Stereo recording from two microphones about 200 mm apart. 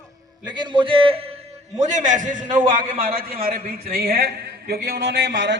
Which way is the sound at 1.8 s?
35° right (ahead or behind).